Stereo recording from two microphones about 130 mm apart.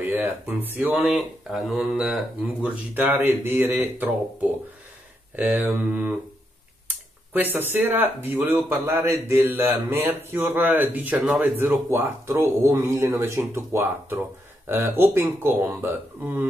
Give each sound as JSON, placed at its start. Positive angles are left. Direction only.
{"t": 0.0, "sound": "a sound", "side_deg": -15}
{"t": 0.7, "sound": "speech", "side_deg": -10}
{"t": 7.5, "sound": "speech", "side_deg": -15}
{"t": 11.5, "sound": "speech", "side_deg": -15}